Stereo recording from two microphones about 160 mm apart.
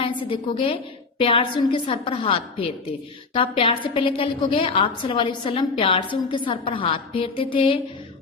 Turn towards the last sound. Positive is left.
turn(degrees=30)  # may be behind; listen again after turning